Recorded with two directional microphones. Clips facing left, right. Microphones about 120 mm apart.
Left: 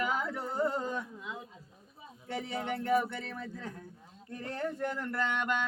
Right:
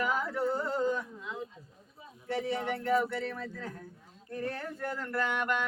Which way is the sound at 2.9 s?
20° left (ahead or behind).